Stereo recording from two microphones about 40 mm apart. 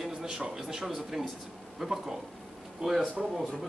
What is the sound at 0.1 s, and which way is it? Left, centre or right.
Speech, centre.